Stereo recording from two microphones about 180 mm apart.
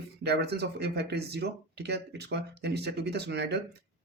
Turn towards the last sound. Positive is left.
turn(degrees=-70)  # may be behind; listen again after turning